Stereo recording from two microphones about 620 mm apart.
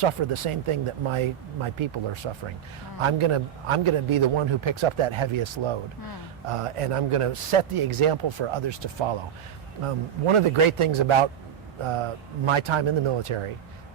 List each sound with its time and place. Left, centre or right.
0.0 s a man's voice: right
9.8 s a man's voice: right